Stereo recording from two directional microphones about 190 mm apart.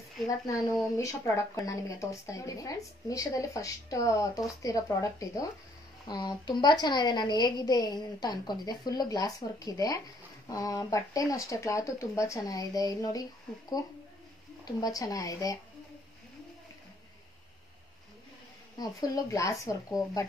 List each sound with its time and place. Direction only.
0.9 s a woman's voice: 15° left (ahead or behind)
18.8 s a woman's voice: 20° left (ahead or behind)